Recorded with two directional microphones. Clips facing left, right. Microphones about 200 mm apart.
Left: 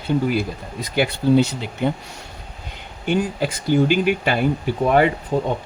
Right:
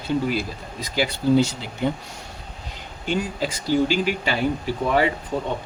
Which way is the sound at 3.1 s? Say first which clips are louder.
Left 4 dB; 55° left (ahead or behind).